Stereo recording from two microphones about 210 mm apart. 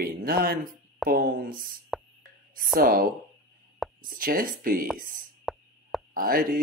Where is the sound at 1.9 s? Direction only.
Centre (ahead or behind).